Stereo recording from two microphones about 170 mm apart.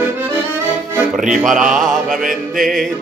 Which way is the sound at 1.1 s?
50° right (ahead or behind).